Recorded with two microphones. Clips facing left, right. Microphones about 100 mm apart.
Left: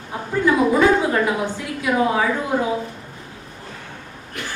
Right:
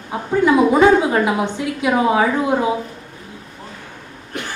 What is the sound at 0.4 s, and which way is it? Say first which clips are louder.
A woman's voice: right 3 dB; 20° right (ahead or behind).